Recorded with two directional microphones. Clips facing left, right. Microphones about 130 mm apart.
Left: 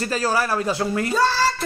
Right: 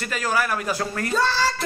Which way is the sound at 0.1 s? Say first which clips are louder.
Left 1 dB; 30° left (ahead or behind).